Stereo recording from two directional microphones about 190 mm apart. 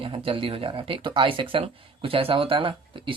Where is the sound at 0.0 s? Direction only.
30° right (ahead or behind).